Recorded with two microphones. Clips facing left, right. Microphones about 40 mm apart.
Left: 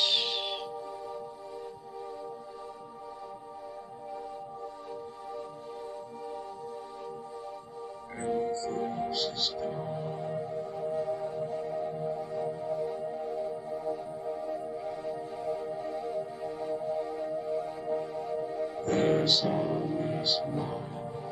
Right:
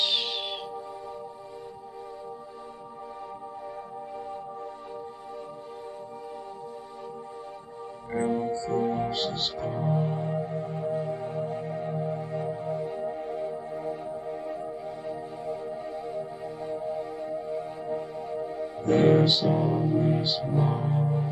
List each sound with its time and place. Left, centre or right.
0.0 s music: centre
8.1 s music: centre; by 9.7 s right
9.7 s speech: right
9.9 s music: right
10.4 s music: right
15.0 s music: centre
20.6 s music: right